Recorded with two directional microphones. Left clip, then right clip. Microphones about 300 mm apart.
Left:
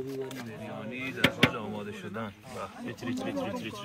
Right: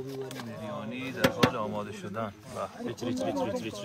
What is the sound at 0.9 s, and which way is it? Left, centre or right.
Speech, right.